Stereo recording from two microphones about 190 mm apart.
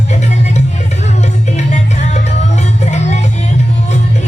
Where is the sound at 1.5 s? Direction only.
40° left (ahead or behind).